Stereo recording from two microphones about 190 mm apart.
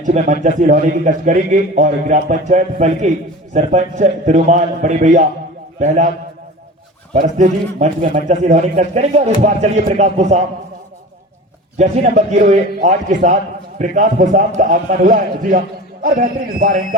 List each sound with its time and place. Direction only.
0.0 s a man's voice: 40° right (ahead or behind)
7.1 s a man's voice: 40° right (ahead or behind)
11.8 s a man's voice: 35° right (ahead or behind)